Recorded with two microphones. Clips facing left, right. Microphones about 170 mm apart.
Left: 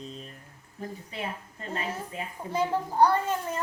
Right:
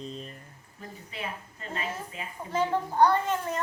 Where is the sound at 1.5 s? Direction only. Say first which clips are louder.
Left 2 dB; 40° left (ahead or behind).